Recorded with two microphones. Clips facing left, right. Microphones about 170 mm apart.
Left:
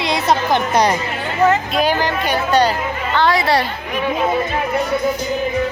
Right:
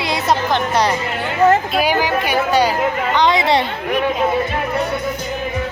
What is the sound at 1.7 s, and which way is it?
A woman's voice, 10° right (ahead or behind).